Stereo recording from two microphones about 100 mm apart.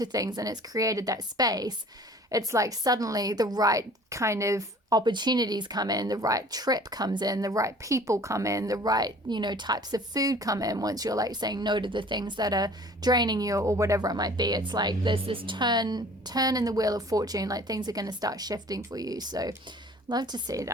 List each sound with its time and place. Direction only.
0.0 s a woman's voice: 40° right (ahead or behind)
15.1 s a woman's voice: 60° right (ahead or behind); by 20.7 s 40° right (ahead or behind)